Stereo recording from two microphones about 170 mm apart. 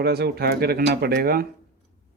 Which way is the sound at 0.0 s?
70° right (ahead or behind).